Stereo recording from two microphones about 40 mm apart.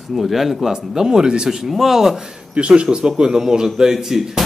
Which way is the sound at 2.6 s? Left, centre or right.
Right.